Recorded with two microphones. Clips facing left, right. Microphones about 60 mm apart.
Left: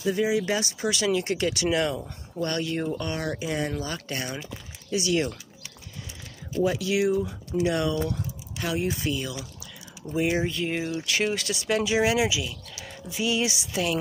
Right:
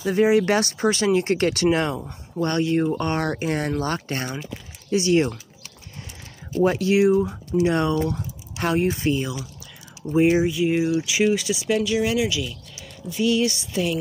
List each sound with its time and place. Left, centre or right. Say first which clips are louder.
0.0 s speech: right 6 dB; right
0.8 s speech: right 5 dB; right
2.0 s speech: right 4 dB; centre
3.0 s speech: right 6 dB; right
4.9 s speech: right 6 dB; right
6.6 s speech: right 5 dB; right
6.9 s speech: right 6 dB; right
8.5 s speech: right 7 dB; right
8.8 s speech: right 6 dB; right
10.3 s speech: right 7 dB; centre
11.8 s a woman's voice: right 1 dB; centre